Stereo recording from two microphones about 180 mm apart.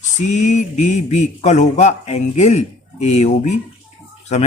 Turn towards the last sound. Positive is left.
turn(degrees=40)  # may be behind; listen again after turning